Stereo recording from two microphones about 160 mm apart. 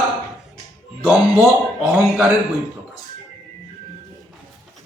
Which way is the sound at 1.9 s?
Centre (ahead or behind).